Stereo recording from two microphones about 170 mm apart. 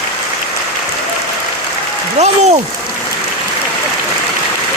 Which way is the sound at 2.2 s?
40° right (ahead or behind).